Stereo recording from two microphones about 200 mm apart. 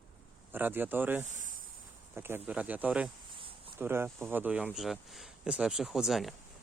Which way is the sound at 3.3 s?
25° right (ahead or behind).